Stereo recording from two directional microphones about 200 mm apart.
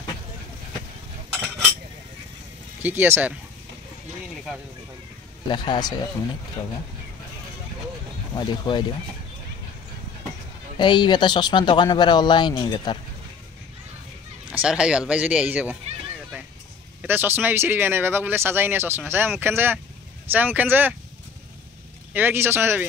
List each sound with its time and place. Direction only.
2.8 s speech: 10° right (ahead or behind)
5.5 s speech: 20° left (ahead or behind)
8.4 s speech: 20° left (ahead or behind)
10.8 s speech: 20° left (ahead or behind)
14.5 s speech: 5° right (ahead or behind)
17.0 s speech: 10° right (ahead or behind)
22.1 s speech: 10° right (ahead or behind)